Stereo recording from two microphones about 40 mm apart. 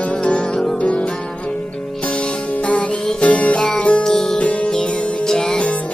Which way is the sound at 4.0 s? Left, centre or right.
Centre.